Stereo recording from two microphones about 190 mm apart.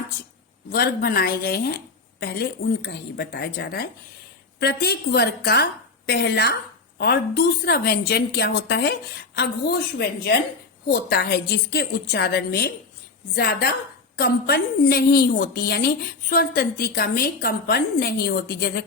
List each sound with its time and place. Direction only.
0.7 s a woman's voice: 55° left (ahead or behind)